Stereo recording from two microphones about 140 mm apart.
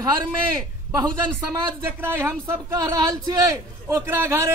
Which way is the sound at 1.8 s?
15° right (ahead or behind).